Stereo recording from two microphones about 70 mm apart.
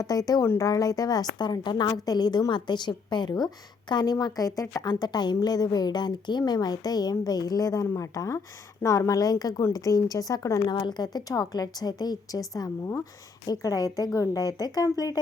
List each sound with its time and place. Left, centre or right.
0.0 s a woman's voice: left
2.5 s a woman's voice: left
4.8 s a woman's voice: left
10.7 s a woman's voice: left